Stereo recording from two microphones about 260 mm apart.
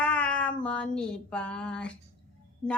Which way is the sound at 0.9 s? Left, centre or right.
Centre.